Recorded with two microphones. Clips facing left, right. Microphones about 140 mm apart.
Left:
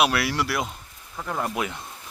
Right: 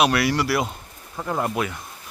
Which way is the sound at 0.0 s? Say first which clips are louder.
Right 3 dB; centre (ahead or behind).